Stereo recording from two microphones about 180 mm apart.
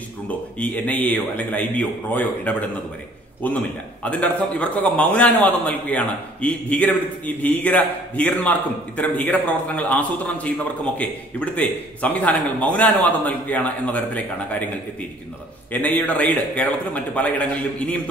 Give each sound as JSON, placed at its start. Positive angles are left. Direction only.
{"t": 0.3, "sound": "a man's voice", "side_deg": 10}
{"t": 15.7, "sound": "a man's voice", "side_deg": 10}